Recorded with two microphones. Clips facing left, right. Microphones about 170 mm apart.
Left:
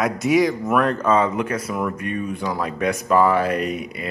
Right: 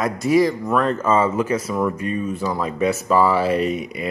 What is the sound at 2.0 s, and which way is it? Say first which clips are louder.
Speech: right 2 dB; 60° left (ahead or behind).